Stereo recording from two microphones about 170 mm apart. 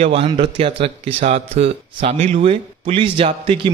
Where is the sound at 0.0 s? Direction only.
35° right (ahead or behind).